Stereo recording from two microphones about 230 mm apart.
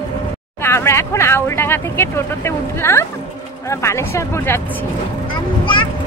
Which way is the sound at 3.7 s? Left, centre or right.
Centre.